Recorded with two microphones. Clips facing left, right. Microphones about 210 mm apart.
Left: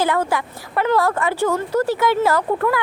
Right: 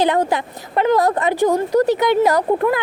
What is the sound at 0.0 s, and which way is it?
Speech, 20° right (ahead or behind).